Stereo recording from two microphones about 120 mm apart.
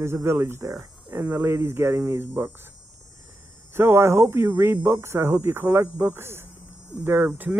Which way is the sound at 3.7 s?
20° right (ahead or behind).